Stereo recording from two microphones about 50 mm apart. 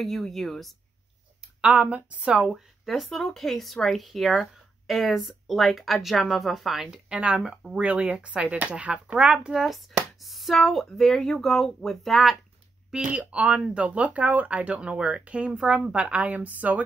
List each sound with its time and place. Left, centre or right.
0.0 s speech: centre
1.8 s speech: right
2.3 s speech: centre
7.2 s speech: right
9.5 s speech: centre
13.2 s speech: right